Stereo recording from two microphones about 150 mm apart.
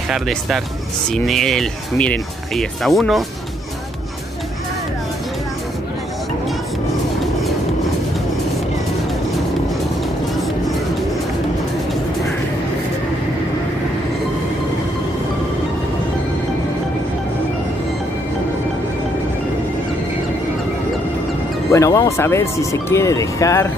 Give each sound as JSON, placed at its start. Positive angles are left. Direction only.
{"t": 0.1, "sound": "speech", "side_deg": 0}
{"t": 21.7, "sound": "speech", "side_deg": 20}